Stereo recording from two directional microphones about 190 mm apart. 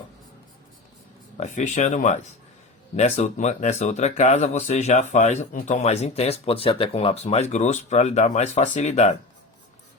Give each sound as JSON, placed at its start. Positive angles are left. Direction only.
{"t": 1.4, "sound": "speech", "side_deg": 40}